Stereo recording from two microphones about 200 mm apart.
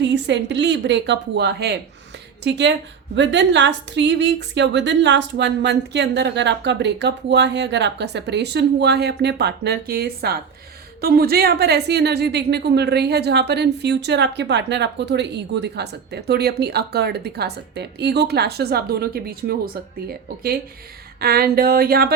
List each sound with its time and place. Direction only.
0.0 s a woman's voice: 60° right (ahead or behind)